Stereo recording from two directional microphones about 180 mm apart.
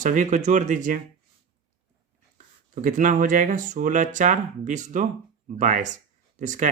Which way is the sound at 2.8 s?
45° right (ahead or behind).